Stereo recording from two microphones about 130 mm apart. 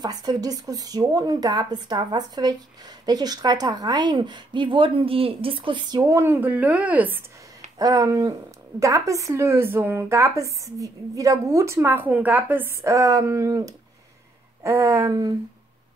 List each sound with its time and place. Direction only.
0.0 s speech: 30° right (ahead or behind)
6.1 s a woman's voice: 15° right (ahead or behind)
7.8 s speech: 25° right (ahead or behind)